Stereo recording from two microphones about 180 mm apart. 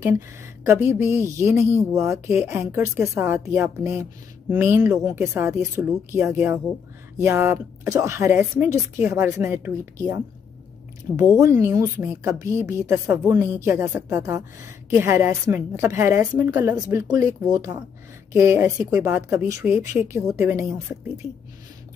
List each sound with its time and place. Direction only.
0.7 s speech: 10° right (ahead or behind)
11.3 s speech: 15° right (ahead or behind)